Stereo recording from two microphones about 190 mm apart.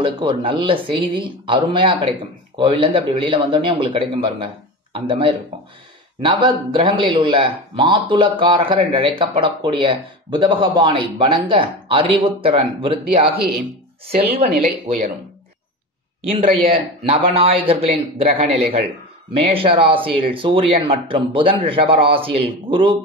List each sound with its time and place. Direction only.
0.0 s speech: 25° right (ahead or behind)
14.1 s speech: 55° right (ahead or behind)
17.0 s a man's voice: 30° right (ahead or behind)